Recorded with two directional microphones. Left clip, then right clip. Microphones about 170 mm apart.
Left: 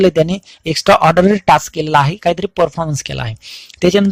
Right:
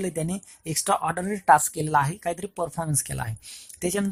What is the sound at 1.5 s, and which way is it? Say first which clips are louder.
Speech: left 9 dB; 20° left (ahead or behind).